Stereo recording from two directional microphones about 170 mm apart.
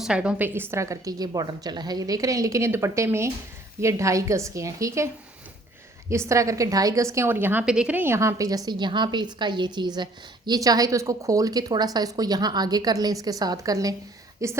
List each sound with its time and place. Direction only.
0.0 s a woman's voice: 5° right (ahead or behind)
6.1 s a woman's voice: 15° right (ahead or behind)